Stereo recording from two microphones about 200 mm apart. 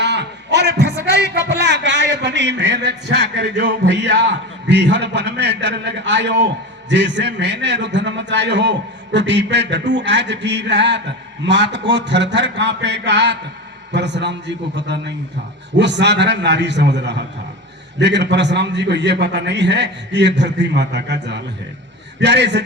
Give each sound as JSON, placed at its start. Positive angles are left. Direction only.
{"t": 0.0, "sound": "a man's voice", "side_deg": -60}